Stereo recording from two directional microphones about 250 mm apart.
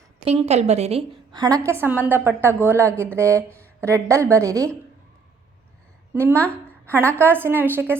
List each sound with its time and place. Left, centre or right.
0.3 s a woman's voice: right
6.1 s a woman's voice: centre